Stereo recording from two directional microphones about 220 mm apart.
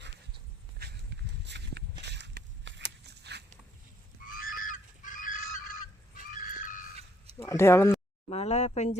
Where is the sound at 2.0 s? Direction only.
50° right (ahead or behind).